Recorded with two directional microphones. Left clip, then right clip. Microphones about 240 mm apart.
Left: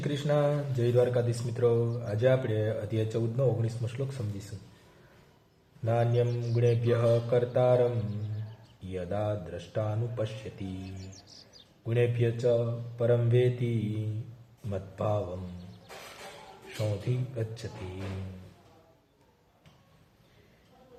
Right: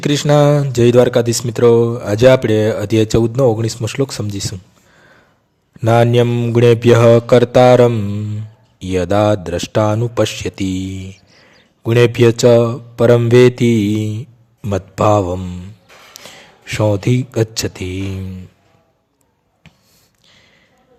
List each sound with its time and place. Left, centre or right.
0.0 s speech: right
5.8 s speech: right
8.9 s speech: right
11.1 s a sound: centre
11.9 s speech: right
17.6 s speech: right